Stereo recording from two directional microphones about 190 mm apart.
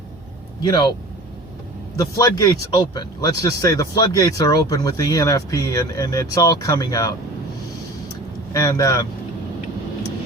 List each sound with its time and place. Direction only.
0.6 s speech: 20° left (ahead or behind)
2.0 s speech: 20° left (ahead or behind)
8.5 s speech: 20° left (ahead or behind)